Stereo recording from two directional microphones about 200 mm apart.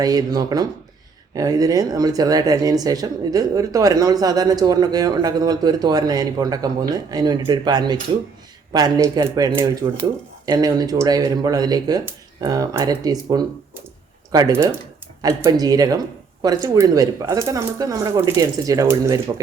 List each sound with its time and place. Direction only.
0.0 s speech: 20° right (ahead or behind)